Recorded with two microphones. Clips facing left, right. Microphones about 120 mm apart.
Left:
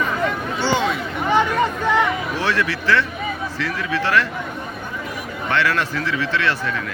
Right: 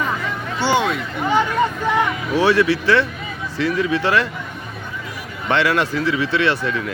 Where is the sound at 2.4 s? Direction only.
15° right (ahead or behind).